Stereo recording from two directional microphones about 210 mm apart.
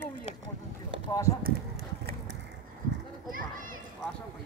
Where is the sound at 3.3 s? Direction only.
40° right (ahead or behind).